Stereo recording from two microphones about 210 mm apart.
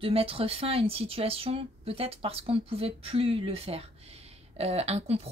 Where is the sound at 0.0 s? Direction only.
25° right (ahead or behind).